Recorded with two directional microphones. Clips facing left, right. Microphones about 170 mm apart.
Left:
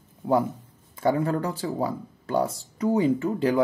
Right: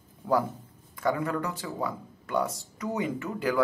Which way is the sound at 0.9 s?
30° left (ahead or behind).